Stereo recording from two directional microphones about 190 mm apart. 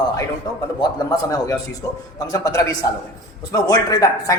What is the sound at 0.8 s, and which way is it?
A man's voice, 20° left (ahead or behind).